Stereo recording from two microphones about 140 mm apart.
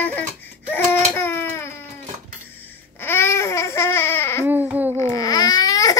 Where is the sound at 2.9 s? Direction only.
15° left (ahead or behind).